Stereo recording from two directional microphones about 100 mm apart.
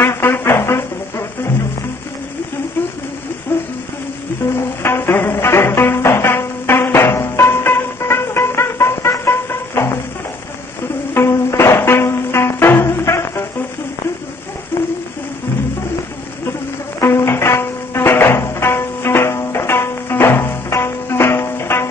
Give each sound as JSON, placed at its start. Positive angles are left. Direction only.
{"t": 0.0, "sound": "music", "side_deg": 25}
{"t": 4.8, "sound": "music", "side_deg": 25}
{"t": 11.1, "sound": "music", "side_deg": 25}
{"t": 17.0, "sound": "music", "side_deg": 25}